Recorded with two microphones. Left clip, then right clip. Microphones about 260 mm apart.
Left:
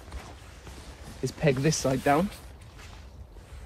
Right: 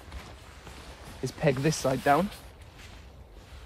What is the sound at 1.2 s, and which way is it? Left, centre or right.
Speech, centre.